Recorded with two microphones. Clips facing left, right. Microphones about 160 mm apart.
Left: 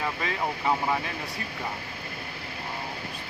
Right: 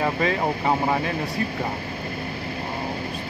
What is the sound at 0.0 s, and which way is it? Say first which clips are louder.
Vehicle: right 8 dB; 75° right (ahead or behind).